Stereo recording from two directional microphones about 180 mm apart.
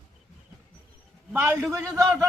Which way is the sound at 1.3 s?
15° right (ahead or behind).